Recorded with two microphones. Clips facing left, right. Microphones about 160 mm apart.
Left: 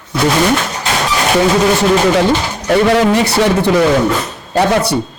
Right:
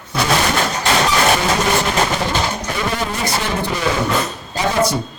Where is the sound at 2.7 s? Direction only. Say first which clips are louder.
Left 12 dB; 80° left.